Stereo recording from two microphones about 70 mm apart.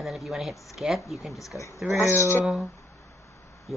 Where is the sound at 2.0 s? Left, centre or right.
Left.